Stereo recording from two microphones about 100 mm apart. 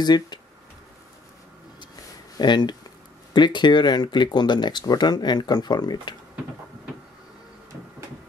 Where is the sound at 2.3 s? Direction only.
45° left (ahead or behind).